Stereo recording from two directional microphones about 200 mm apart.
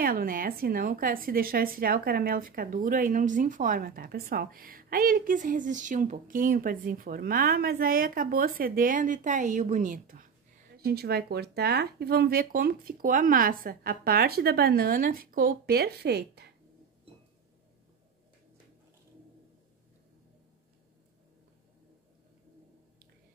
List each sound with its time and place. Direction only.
0.0 s a woman's voice: 45° right (ahead or behind)